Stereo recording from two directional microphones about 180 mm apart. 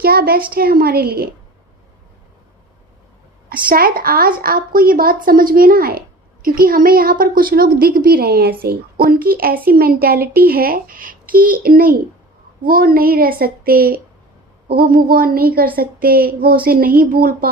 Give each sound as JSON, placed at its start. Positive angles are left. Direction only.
{"t": 0.0, "sound": "a woman's voice", "side_deg": -60}
{"t": 3.5, "sound": "a woman's voice", "side_deg": -55}